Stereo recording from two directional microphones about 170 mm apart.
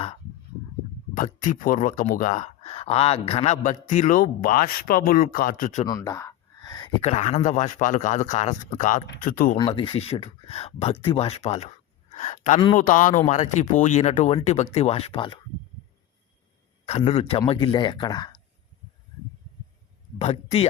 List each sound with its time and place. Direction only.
1.1 s speech: 50° left (ahead or behind)
5.8 s a sound: 20° left (ahead or behind)
7.0 s speech: 40° left (ahead or behind)
9.6 s speech: 30° left (ahead or behind)
12.1 s a sound: 45° left (ahead or behind)
12.7 s speech: 50° left (ahead or behind); by 15.4 s 30° left (ahead or behind)
16.8 s speech: 40° left (ahead or behind)
20.1 s speech: 35° left (ahead or behind)